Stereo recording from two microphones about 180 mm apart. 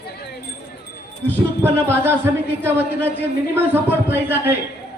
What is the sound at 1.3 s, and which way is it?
Speech, 10° right (ahead or behind).